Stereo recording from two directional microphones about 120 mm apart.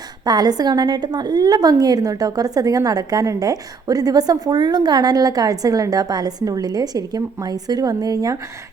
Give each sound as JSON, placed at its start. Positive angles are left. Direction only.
{"t": 0.3, "sound": "a woman's voice", "side_deg": -35}